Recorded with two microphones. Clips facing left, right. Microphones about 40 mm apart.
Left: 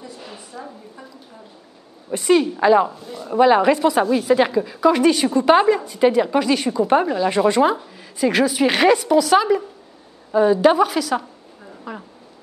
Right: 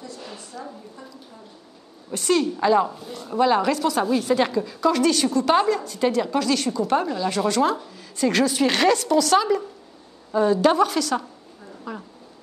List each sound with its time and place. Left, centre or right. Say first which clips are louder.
0.0 s a sound: left 1 dB; centre
2.0 s a woman's voice: left 5 dB; centre
2.9 s speech: left 4 dB; centre
3.3 s speech: left 5 dB; left
4.0 s a woman's voice: left 4 dB; centre